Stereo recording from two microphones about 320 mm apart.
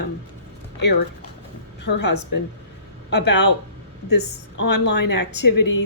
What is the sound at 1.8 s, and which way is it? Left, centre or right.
A woman's voice, left.